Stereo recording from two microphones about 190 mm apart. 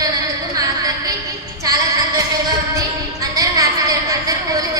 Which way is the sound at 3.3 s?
20° right (ahead or behind).